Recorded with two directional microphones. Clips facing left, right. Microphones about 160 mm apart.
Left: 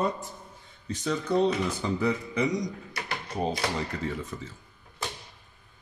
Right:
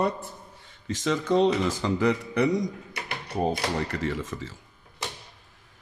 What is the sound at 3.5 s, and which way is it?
Speech, 75° right (ahead or behind).